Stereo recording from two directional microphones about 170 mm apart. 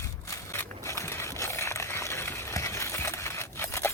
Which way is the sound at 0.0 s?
15° left (ahead or behind).